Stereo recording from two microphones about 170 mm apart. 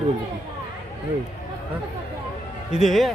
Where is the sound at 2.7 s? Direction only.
Centre (ahead or behind).